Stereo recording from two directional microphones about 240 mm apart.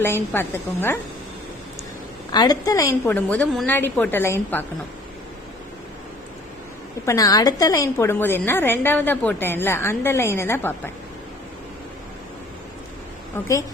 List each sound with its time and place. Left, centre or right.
0.0 s a woman's voice: centre
2.3 s a woman's voice: centre
3.1 s a woman's voice: centre
7.0 s a woman's voice: centre
13.3 s a woman's voice: centre